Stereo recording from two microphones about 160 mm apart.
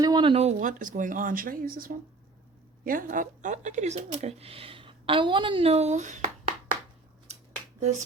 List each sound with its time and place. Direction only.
0.0 s speech: 30° right (ahead or behind); by 6.3 s 50° right (ahead or behind)
7.8 s speech: 45° right (ahead or behind)